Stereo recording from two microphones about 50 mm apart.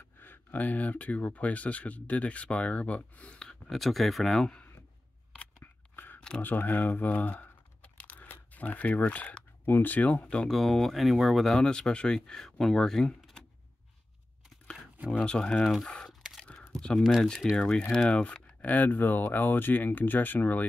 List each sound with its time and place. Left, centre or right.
0.2 s speech: left
3.3 s a sound: centre
3.7 s speech: centre
5.6 s scissors: left
6.1 s a sound: centre
6.4 s speech: left
7.8 s keys jangling: left
8.5 s speech: left
10.5 s speech: centre
11.5 s speech: centre
15.0 s speech: centre
15.5 s speech: centre
16.5 s a sound: centre
17.2 s speech: centre; by 20.6 s left